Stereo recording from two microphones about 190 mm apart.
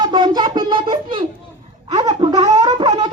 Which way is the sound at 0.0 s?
25° right (ahead or behind).